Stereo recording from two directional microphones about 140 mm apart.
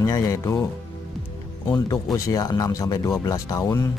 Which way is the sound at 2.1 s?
25° left (ahead or behind).